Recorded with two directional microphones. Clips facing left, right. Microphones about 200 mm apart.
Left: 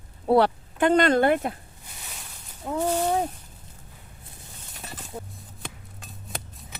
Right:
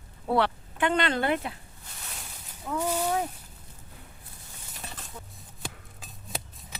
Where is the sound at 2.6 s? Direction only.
35° left (ahead or behind).